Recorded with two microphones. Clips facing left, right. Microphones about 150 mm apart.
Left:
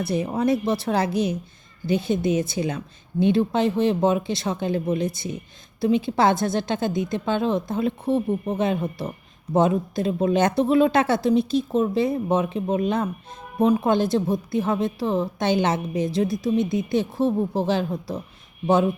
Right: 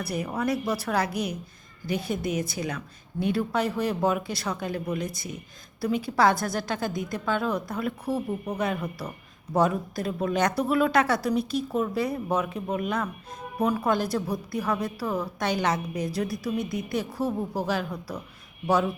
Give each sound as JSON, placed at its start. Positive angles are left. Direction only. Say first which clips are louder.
{"t": 0.0, "sound": "a woman's voice", "louder": "left 6 dB", "side_deg": 25}